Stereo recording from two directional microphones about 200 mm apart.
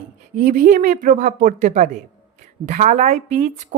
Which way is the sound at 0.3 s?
40° right (ahead or behind).